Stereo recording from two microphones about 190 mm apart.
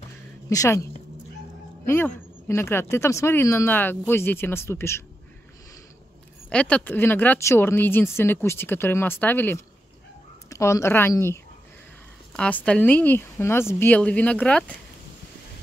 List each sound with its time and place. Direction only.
0.5 s speech: 15° left (ahead or behind)
1.9 s speech: 10° left (ahead or behind)
6.5 s speech: 5° left (ahead or behind)
12.4 s speech: 5° left (ahead or behind)